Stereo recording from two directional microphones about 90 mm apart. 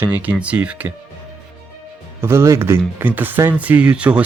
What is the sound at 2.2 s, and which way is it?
Speech, 30° right (ahead or behind).